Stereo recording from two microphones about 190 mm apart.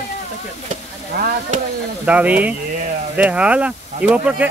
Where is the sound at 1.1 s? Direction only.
45° right (ahead or behind).